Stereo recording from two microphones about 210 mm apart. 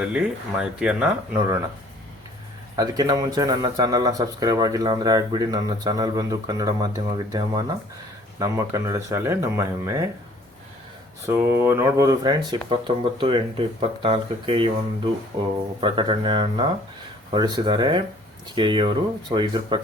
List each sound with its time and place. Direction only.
0.0 s speech: 5° right (ahead or behind)
2.7 s a man's voice: 15° right (ahead or behind)
11.3 s speech: 10° right (ahead or behind)